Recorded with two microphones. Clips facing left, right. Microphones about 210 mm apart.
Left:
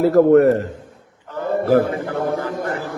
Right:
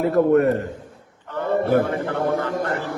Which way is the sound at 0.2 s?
85° left.